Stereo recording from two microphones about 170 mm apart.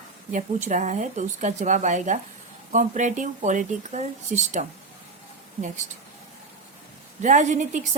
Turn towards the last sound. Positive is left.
turn(degrees=-45)  # may be behind; listen again after turning